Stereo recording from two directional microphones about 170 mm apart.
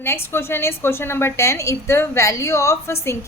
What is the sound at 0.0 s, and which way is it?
A woman's voice, 15° left (ahead or behind).